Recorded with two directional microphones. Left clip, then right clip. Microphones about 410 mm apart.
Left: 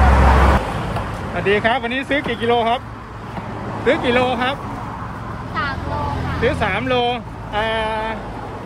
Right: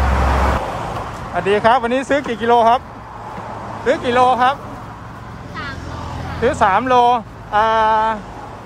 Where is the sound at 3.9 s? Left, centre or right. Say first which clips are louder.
Right 5 dB; right.